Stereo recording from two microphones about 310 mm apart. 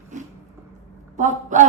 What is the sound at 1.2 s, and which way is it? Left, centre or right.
Speech, right.